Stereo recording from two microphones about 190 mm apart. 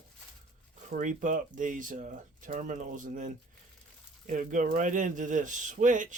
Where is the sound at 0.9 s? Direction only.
45° right (ahead or behind).